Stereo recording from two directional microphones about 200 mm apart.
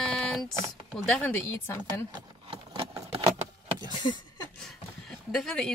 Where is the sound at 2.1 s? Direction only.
25° right (ahead or behind).